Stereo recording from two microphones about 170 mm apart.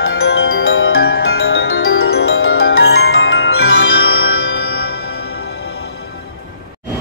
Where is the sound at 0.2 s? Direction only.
70° left (ahead or behind).